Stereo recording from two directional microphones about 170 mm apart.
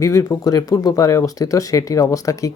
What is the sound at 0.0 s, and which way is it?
Speech, 20° left (ahead or behind).